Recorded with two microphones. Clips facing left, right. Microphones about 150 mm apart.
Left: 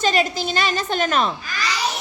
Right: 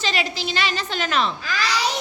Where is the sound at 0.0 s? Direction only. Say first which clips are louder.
Left 5 dB; 45° left (ahead or behind).